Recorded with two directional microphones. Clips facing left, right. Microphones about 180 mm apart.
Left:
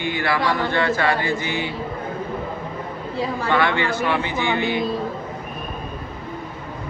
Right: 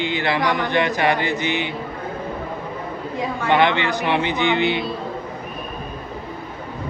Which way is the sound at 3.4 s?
20° right (ahead or behind).